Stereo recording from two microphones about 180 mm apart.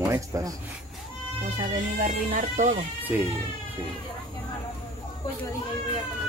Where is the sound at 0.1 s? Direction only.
20° right (ahead or behind).